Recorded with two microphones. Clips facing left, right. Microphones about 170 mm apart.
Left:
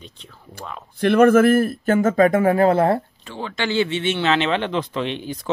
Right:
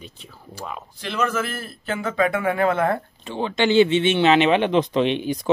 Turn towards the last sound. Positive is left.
turn(degrees=-15)  # may be behind; listen again after turning